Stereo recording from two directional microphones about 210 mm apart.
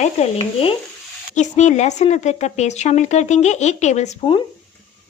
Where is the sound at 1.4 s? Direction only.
35° left (ahead or behind).